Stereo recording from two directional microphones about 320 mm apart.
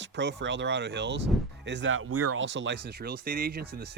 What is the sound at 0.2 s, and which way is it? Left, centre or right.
Speech, right.